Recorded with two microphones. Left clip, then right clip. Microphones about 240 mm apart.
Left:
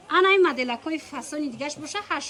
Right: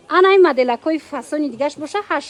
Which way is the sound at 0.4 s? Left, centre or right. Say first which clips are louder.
Right 9 dB; right.